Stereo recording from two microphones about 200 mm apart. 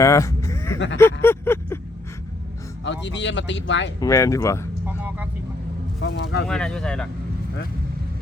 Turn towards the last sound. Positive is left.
turn(degrees=5)  # may be behind; listen again after turning